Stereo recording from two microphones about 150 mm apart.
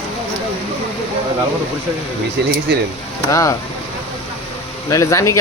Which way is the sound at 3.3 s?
20° left (ahead or behind).